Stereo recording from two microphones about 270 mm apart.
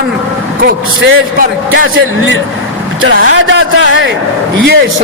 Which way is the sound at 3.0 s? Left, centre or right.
Right.